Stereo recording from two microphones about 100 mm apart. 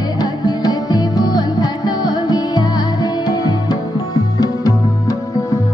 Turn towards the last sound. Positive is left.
turn(degrees=40)  # may be behind; listen again after turning